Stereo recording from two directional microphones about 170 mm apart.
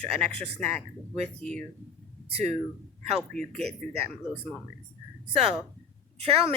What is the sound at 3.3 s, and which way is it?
Speech, 5° left (ahead or behind).